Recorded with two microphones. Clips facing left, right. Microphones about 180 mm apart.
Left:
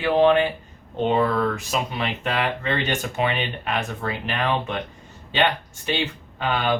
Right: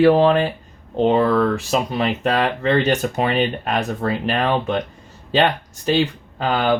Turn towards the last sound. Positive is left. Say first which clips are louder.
# right 4 dB
turn(degrees=-35)  # may be behind; listen again after turning